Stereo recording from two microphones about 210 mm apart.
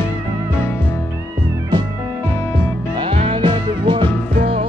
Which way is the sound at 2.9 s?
25° right (ahead or behind).